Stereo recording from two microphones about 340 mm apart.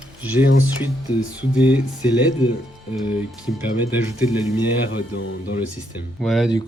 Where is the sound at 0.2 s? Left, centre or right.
Centre.